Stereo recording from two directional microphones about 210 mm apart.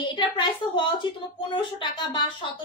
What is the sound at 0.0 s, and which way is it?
A woman's voice, 20° left (ahead or behind).